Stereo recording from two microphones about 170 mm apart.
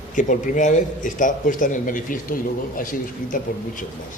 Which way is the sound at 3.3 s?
50° left (ahead or behind).